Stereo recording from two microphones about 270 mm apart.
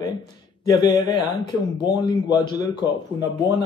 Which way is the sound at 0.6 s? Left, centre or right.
Centre.